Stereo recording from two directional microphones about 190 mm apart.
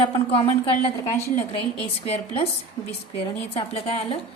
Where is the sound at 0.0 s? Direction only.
30° left (ahead or behind).